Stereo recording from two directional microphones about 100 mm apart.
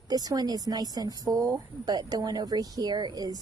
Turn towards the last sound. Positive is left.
turn(degrees=-40)  # may be behind; listen again after turning